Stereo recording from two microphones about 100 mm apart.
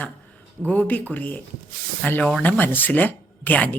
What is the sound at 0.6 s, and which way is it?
Speech, 15° left (ahead or behind).